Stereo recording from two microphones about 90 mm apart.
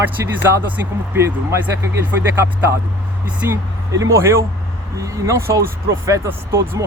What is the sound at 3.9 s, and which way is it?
Speech, 35° right (ahead or behind).